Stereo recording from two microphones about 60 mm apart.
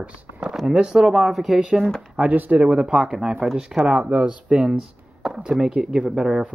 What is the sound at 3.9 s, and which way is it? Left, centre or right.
Speech, right.